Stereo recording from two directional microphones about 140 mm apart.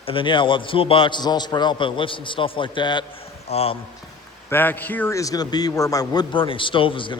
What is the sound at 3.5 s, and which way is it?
Speech, 45° left (ahead or behind).